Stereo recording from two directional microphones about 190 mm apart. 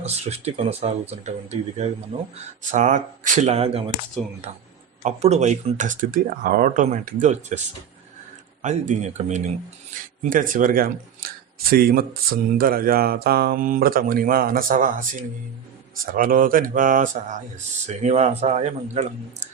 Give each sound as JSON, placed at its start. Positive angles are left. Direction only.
{"t": 0.0, "sound": "speech", "side_deg": -35}
{"t": 2.7, "sound": "speech", "side_deg": -40}
{"t": 4.2, "sound": "speech", "side_deg": 5}
{"t": 5.0, "sound": "speech", "side_deg": -35}
{"t": 8.6, "sound": "speech", "side_deg": -35}